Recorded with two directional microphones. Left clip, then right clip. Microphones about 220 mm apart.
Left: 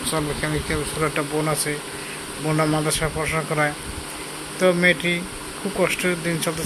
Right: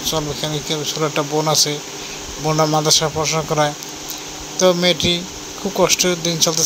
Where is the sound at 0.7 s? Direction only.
10° right (ahead or behind).